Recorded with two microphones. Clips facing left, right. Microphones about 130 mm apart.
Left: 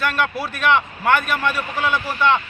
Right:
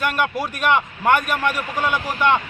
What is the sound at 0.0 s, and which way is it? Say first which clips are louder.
A man's voice: even; 15° right (ahead or behind).